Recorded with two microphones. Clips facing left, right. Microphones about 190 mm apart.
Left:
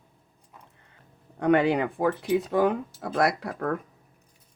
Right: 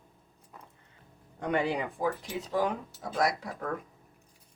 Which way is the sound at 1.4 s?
65° left (ahead or behind).